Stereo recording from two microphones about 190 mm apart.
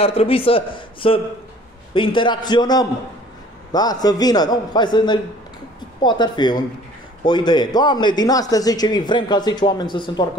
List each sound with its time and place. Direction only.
0.0 s speech: 30° left (ahead or behind)